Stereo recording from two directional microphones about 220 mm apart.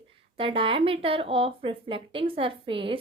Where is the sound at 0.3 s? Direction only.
25° right (ahead or behind).